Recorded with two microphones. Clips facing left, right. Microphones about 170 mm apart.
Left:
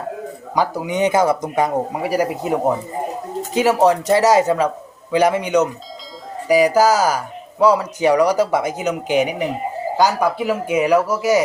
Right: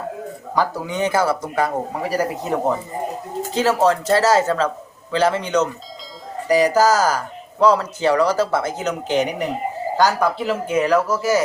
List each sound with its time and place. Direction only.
0.5 s speech: 15° left (ahead or behind)